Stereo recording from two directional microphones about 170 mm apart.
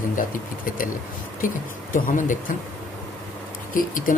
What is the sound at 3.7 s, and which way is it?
Speech, 55° left (ahead or behind).